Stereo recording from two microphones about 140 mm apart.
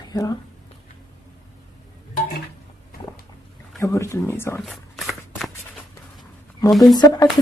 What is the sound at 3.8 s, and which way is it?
Speech, 20° left (ahead or behind).